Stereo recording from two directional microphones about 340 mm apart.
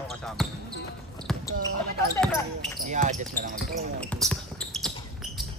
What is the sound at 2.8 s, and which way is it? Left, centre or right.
Speech, right.